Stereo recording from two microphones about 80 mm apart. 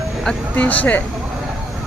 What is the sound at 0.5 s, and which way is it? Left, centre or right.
Speech, centre.